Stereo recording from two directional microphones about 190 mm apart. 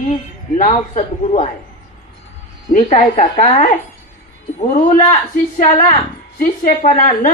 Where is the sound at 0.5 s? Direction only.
40° left (ahead or behind).